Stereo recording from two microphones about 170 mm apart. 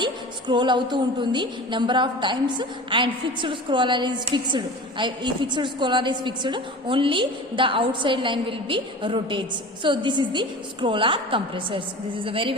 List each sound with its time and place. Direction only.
0.0 s a woman's voice: 25° right (ahead or behind)